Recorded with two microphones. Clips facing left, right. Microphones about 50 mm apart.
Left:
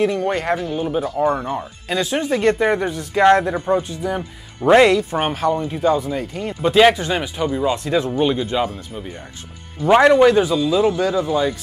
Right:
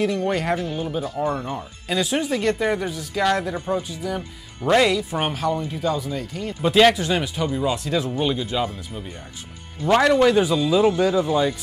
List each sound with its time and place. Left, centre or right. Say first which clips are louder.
0.3 s speech: left 2 dB; centre; by 1.5 s left
2.1 s speech: left 6 dB; centre
3.2 s speech: left 8 dB; left
5.2 s speech: left 4 dB; centre
5.7 s speech: left 6 dB; left
6.6 s speech: left 3 dB; centre
9.8 s speech: left 5 dB; centre
10.4 s speech: left 1 dB; centre